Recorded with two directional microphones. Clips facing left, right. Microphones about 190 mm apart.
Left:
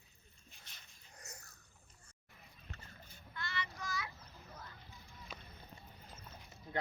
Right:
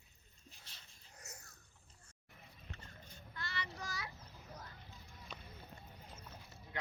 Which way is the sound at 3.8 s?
35° right (ahead or behind).